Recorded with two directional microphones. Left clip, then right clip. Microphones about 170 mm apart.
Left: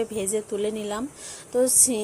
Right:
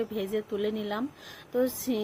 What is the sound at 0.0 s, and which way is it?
Speech, centre (ahead or behind).